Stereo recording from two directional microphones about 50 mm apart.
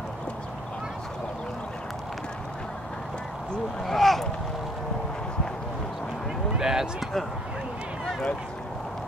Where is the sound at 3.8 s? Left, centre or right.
Centre.